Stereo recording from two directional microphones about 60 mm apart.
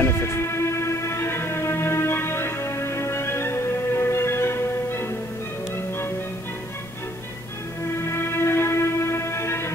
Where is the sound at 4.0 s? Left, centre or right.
Left.